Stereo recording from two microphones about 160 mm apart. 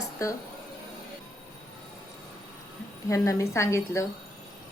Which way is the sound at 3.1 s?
20° left (ahead or behind).